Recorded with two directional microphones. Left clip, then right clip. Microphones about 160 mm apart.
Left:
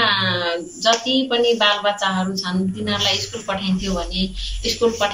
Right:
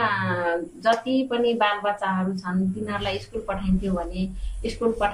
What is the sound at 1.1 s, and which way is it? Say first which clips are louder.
Speech: left 5 dB; 5° right (ahead or behind).